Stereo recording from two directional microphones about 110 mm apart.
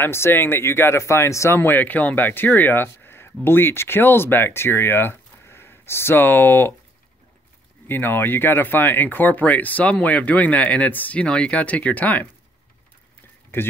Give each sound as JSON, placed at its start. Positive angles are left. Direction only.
{"t": 0.0, "sound": "speech", "side_deg": 20}
{"t": 7.9, "sound": "speech", "side_deg": 20}
{"t": 13.5, "sound": "speech", "side_deg": 20}